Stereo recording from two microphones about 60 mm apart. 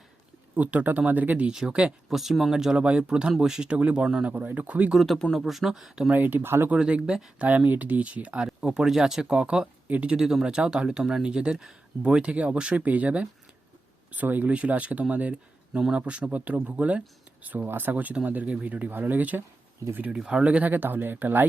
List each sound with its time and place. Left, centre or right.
0.5 s speech: right
1.5 s speech: centre
2.0 s speech: centre
4.3 s speech: right
4.9 s speech: centre
6.1 s speech: right
6.7 s speech: centre
8.4 s speech: centre; by 19.4 s right
20.1 s speech: centre; by 21.4 s right